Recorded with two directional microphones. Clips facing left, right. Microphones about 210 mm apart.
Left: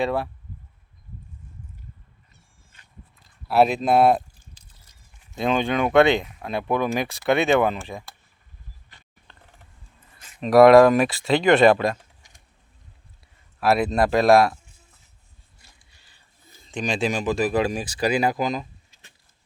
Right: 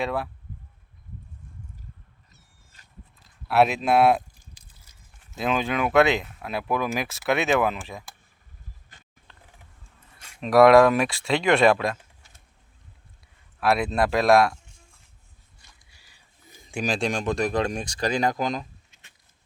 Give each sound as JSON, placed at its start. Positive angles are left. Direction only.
{"t": 0.0, "sound": "speech", "side_deg": 0}
{"t": 2.7, "sound": "a sound", "side_deg": -40}
{"t": 3.2, "sound": "a sound", "side_deg": 0}
{"t": 3.8, "sound": "speech", "side_deg": -5}
{"t": 8.9, "sound": "mechanisms", "side_deg": -50}
{"t": 9.3, "sound": "mechanisms", "side_deg": 0}
{"t": 10.2, "sound": "speech", "side_deg": 0}
{"t": 13.6, "sound": "speech", "side_deg": 0}
{"t": 16.0, "sound": "a sound", "side_deg": -10}
{"t": 16.8, "sound": "speech", "side_deg": 0}